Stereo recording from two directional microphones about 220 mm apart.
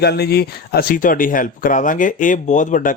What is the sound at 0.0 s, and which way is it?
Speech, 45° left (ahead or behind).